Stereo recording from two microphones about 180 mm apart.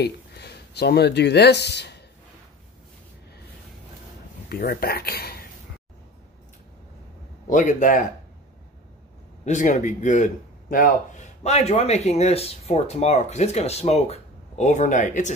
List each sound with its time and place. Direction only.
0.0 s speech: 65° left (ahead or behind)
4.5 s speech: 55° left (ahead or behind)
7.4 s a man's voice: 45° left (ahead or behind)
9.4 s speech: 40° left (ahead or behind)